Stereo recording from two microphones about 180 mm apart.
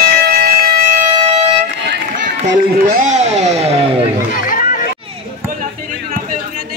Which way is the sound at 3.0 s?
40° right (ahead or behind).